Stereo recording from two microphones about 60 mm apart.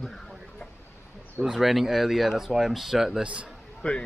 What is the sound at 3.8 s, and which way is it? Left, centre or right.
Speech, centre.